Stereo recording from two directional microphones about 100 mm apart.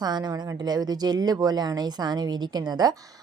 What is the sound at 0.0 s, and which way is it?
A woman's voice, 45° right (ahead or behind).